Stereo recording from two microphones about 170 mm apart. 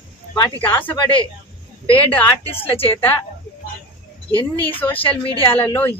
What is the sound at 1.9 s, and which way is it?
Speech, 30° left (ahead or behind).